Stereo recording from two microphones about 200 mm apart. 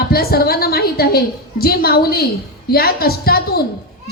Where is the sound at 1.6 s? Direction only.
50° left (ahead or behind).